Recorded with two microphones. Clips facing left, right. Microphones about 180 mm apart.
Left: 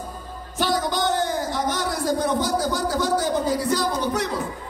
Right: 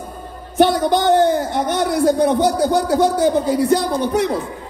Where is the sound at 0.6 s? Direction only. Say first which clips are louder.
Right 9 dB; 60° right (ahead or behind).